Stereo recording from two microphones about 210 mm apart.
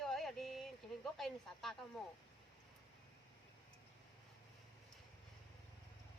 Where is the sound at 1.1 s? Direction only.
Centre (ahead or behind).